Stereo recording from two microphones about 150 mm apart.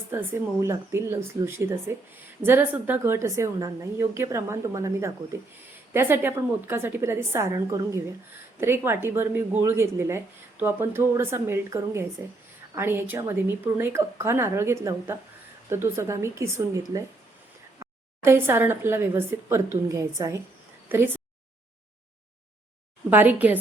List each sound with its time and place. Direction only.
0.1 s a woman's voice: 15° right (ahead or behind)
23.0 s speech: 15° right (ahead or behind)